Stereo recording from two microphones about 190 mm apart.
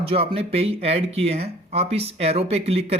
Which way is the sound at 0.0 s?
30° right (ahead or behind).